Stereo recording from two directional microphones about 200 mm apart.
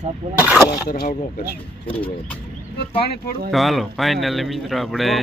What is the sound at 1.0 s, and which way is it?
Speech, 50° left (ahead or behind).